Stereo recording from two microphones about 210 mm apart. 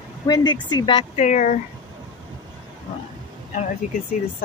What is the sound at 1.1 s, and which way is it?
Speech, 35° left (ahead or behind).